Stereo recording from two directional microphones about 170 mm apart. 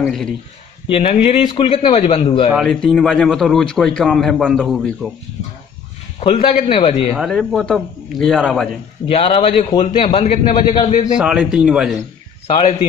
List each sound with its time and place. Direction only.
0.0 s a man's voice: 5° left (ahead or behind)
0.8 s a man's voice: 35° left (ahead or behind)
2.5 s a man's voice: centre (ahead or behind)
6.5 s a man's voice: 35° left (ahead or behind)
7.1 s a man's voice: centre (ahead or behind)
9.0 s a man's voice: 30° left (ahead or behind)
10.9 s a man's voice: 45° left (ahead or behind)
11.1 s a man's voice: 5° right (ahead or behind)